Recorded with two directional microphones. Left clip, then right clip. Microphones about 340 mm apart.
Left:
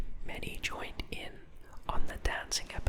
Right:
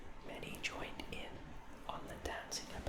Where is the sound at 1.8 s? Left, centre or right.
Left.